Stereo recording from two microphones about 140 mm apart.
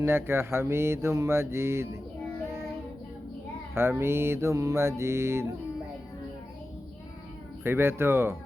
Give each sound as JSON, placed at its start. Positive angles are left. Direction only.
{"t": 0.0, "sound": "mantra", "side_deg": -15}
{"t": 3.8, "sound": "music", "side_deg": -15}
{"t": 7.6, "sound": "mantra", "side_deg": -15}